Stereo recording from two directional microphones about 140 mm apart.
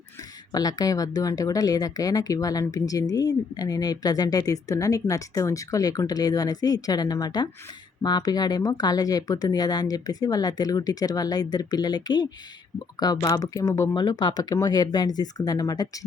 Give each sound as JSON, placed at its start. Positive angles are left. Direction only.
{"t": 0.5, "sound": "speech", "side_deg": 25}